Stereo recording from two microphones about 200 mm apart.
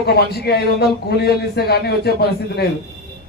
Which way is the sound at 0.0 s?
55° left (ahead or behind).